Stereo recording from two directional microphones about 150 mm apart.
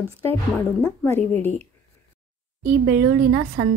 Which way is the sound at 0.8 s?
15° left (ahead or behind).